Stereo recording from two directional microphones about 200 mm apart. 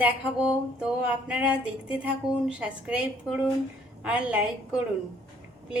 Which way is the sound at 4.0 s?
5° right (ahead or behind).